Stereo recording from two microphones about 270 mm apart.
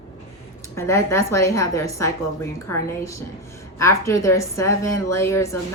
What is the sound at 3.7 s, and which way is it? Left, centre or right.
A woman's voice, centre.